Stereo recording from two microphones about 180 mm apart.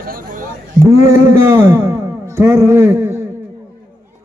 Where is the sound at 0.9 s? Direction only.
15° right (ahead or behind).